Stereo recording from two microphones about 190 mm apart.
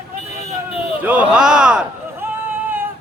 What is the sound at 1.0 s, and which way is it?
A man's voice, 10° right (ahead or behind).